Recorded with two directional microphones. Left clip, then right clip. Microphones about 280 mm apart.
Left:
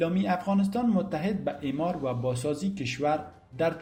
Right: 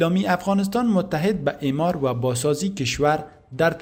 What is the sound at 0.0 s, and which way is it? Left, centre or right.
A man's voice, right.